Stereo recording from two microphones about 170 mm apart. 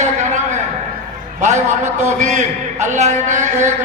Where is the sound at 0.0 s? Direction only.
45° right (ahead or behind).